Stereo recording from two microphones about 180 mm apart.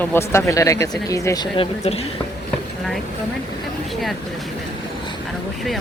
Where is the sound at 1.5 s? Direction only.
30° left (ahead or behind).